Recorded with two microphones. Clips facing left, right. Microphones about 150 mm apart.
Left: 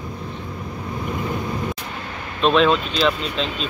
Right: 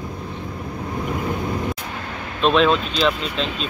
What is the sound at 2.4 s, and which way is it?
Speech, centre (ahead or behind).